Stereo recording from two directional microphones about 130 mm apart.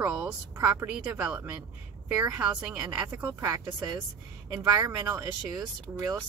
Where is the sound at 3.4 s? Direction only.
25° right (ahead or behind).